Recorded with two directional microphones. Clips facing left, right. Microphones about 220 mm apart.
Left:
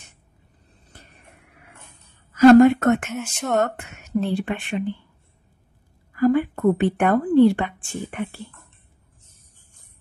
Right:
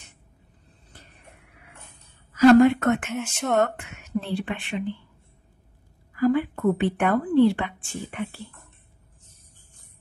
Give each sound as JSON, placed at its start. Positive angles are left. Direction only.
{"t": 2.3, "sound": "speech", "side_deg": 45}
{"t": 3.1, "sound": "speech", "side_deg": 0}
{"t": 3.6, "sound": "speech", "side_deg": 40}
{"t": 6.1, "sound": "a woman's voice", "side_deg": 45}